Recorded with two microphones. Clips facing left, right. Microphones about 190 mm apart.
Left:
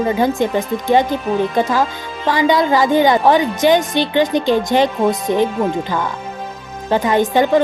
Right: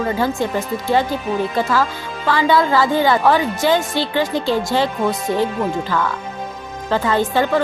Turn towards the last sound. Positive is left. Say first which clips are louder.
# left 4 dB
turn(degrees=15)  # may be behind; listen again after turning